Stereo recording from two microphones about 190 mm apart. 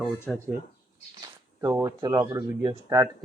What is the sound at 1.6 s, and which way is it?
Speech, 15° right (ahead or behind).